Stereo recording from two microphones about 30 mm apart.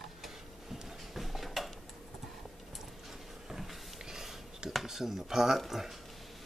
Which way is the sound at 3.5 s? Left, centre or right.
Centre.